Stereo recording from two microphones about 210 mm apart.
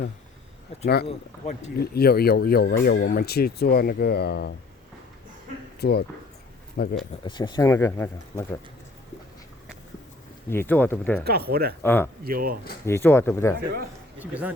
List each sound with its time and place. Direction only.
1.0 s speech: 30° left (ahead or behind)
1.8 s speech: 45° left (ahead or behind)
5.8 s speech: 50° left (ahead or behind)
7.3 s speech: 20° left (ahead or behind)
10.5 s speech: 10° left (ahead or behind)
11.2 s speech: 50° right (ahead or behind)
11.8 s speech: 10° left (ahead or behind)
12.2 s speech: 45° right (ahead or behind)
12.8 s speech: 10° left (ahead or behind)
14.2 s a man's voice: 5° right (ahead or behind)